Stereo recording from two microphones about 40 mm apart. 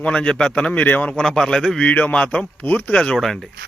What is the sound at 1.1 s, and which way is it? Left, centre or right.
Speech, centre.